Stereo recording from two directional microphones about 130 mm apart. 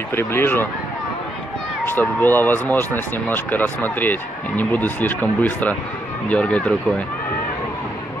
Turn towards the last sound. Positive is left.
turn(degrees=10)  # may be behind; listen again after turning